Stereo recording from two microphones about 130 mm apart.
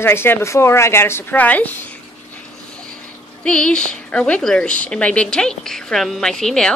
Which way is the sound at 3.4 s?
5° left (ahead or behind).